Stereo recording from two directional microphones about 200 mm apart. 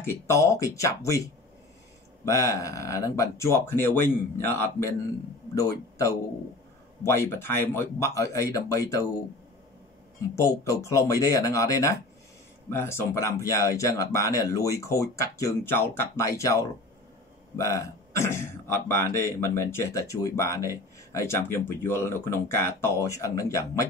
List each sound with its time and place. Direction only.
0.0 s speech: 15° left (ahead or behind)
10.3 s speech: 15° left (ahead or behind)